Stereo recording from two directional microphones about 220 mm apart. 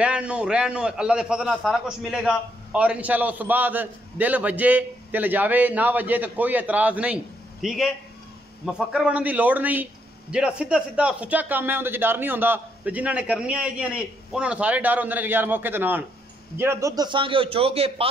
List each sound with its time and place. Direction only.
0.0 s a man's voice: 5° right (ahead or behind); by 18.0 s 25° right (ahead or behind)